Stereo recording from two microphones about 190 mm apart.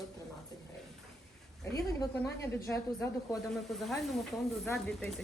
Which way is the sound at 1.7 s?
15° left (ahead or behind).